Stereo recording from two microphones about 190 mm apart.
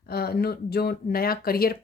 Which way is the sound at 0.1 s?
55° left (ahead or behind).